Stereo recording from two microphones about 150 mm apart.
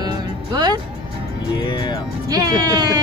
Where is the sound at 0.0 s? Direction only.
30° right (ahead or behind).